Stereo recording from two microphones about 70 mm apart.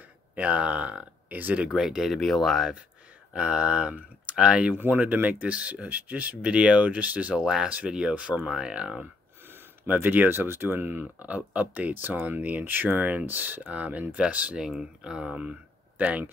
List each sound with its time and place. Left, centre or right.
0.4 s speech: centre
1.8 s speech: centre
3.3 s speech: centre
9.5 s speech: right